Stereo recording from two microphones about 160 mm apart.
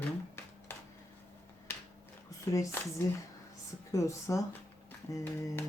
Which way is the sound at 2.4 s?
20° left (ahead or behind).